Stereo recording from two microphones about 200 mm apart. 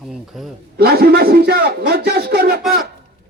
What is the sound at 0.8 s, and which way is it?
A man's voice, 50° right (ahead or behind).